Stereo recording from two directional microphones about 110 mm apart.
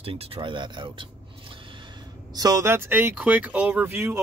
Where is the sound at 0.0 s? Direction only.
60° right (ahead or behind).